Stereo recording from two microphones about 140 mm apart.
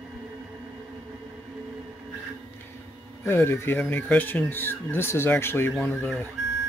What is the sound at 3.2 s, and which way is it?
Speech, 15° left (ahead or behind).